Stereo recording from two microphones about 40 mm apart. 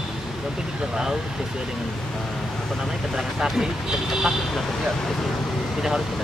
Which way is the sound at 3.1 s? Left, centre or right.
Centre.